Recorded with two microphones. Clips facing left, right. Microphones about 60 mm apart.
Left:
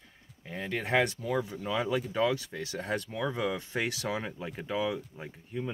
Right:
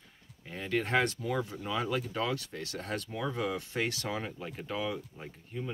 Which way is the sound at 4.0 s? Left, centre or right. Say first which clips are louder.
Left 2 dB; centre.